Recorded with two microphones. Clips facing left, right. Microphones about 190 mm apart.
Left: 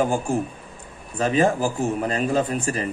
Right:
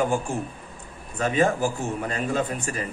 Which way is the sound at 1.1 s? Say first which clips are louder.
Left 2 dB; 30° left (ahead or behind).